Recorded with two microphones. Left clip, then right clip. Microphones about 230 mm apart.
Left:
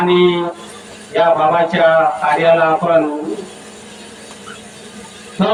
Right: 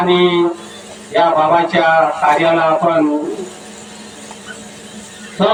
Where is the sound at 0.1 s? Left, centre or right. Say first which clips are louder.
Right 1 dB; right.